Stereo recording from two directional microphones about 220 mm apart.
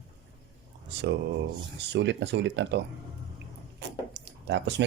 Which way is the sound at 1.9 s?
50° right (ahead or behind).